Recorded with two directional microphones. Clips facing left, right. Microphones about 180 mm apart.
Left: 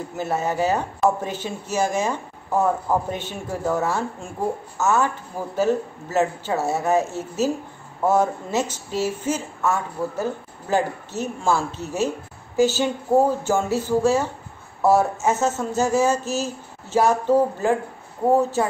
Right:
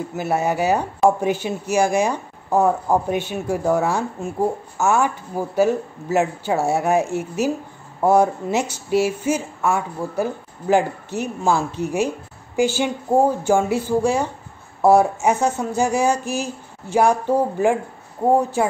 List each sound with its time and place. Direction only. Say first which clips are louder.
0.2 s a woman's voice: right 2 dB; 10° right (ahead or behind)